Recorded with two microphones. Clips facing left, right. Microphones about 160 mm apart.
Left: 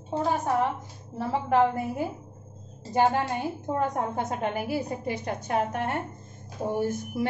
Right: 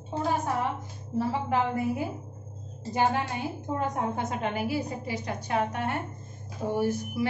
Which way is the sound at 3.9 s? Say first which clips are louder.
Left 1 dB; 45° left (ahead or behind).